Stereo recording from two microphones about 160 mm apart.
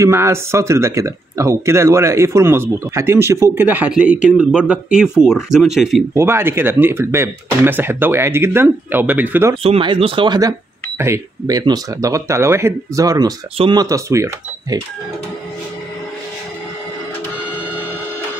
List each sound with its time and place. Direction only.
0.0 s speech: 15° right (ahead or behind); by 6.0 s centre (ahead or behind)
6.1 s speech: 15° right (ahead or behind)
9.6 s speech: 35° right (ahead or behind); by 14.8 s 20° right (ahead or behind)